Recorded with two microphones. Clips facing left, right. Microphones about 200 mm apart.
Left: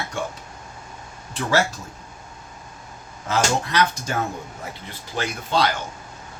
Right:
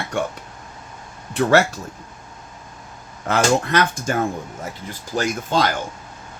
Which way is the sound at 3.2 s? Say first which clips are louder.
Right 4 dB; 60° right (ahead or behind).